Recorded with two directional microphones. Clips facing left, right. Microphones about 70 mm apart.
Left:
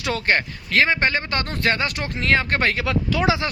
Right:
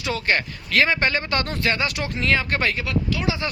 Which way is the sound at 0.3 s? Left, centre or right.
Left.